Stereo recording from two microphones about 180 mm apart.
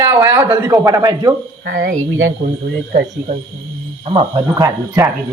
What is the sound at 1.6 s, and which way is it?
Speech, 55° right (ahead or behind).